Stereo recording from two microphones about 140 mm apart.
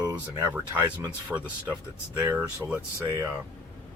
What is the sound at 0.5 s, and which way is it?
Speech, 10° right (ahead or behind).